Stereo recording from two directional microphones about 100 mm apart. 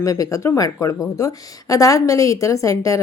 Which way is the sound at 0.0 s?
35° left (ahead or behind).